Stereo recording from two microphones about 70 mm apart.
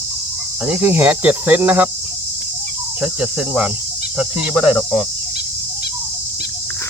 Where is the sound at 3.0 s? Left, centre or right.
Centre.